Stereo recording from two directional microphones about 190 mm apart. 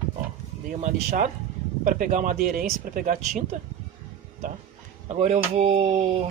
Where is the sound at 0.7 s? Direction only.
45° right (ahead or behind).